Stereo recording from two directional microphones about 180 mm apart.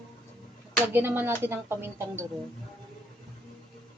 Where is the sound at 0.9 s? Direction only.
10° right (ahead or behind).